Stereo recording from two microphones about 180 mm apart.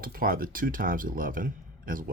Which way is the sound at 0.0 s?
55° right (ahead or behind).